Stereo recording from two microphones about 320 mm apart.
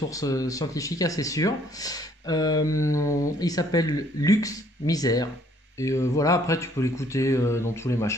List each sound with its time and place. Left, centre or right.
0.1 s speech: centre